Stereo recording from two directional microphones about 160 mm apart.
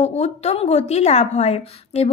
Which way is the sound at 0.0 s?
45° left (ahead or behind).